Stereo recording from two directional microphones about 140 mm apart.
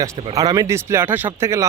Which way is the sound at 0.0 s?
25° right (ahead or behind).